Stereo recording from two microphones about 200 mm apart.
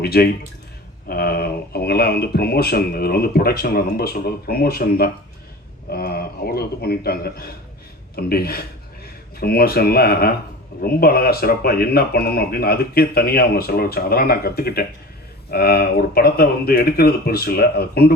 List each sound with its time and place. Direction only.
0.0 s speech: 50° left (ahead or behind)